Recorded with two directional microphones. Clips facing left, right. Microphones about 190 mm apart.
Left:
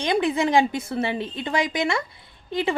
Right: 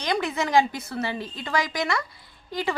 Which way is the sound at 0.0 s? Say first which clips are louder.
Left 5 dB; 25° left (ahead or behind).